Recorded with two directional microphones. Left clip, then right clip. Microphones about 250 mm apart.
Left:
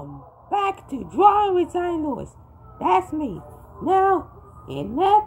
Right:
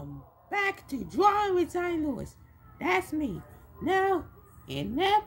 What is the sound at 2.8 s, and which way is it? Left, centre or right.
Speech, centre.